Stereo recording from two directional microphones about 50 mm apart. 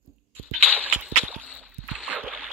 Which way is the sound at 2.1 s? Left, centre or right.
Right.